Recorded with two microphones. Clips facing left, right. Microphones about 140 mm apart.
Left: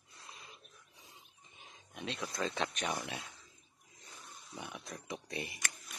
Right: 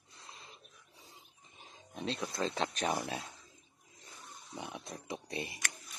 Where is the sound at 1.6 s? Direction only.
30° right (ahead or behind).